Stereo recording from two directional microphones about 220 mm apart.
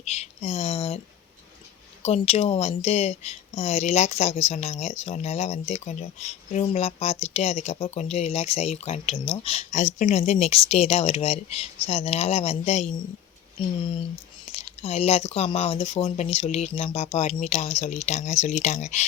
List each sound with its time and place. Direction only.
0.0 s speech: 30° left (ahead or behind)
2.0 s speech: 30° left (ahead or behind)
14.8 s speech: 30° left (ahead or behind)